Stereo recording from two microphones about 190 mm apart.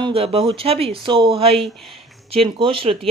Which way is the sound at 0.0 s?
30° right (ahead or behind).